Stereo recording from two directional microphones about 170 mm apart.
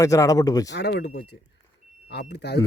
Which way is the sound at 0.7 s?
85° left.